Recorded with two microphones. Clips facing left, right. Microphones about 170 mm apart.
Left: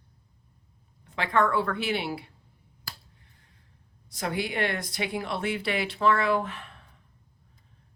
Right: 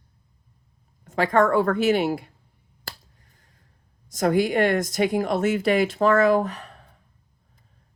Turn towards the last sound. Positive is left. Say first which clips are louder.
# right 7 dB
turn(degrees=-40)  # may be behind; listen again after turning